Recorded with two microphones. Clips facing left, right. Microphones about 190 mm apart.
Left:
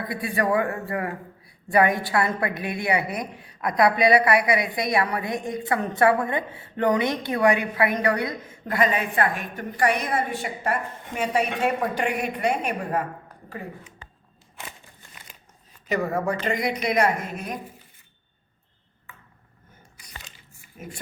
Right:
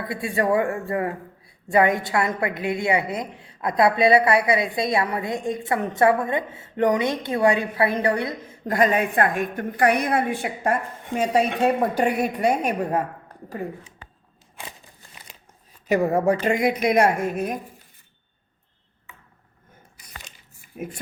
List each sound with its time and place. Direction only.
0.1 s a woman's voice: 25° right (ahead or behind)
8.6 s a woman's voice: 45° right (ahead or behind)
11.1 s a woman's voice: 35° right (ahead or behind)
15.9 s a woman's voice: 40° right (ahead or behind)